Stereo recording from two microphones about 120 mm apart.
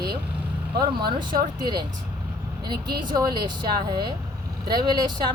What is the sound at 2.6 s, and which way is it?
Speech, 40° right (ahead or behind).